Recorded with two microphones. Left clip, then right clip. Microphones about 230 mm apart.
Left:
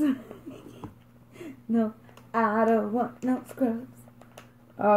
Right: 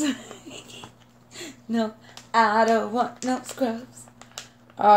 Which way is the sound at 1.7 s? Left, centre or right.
Centre.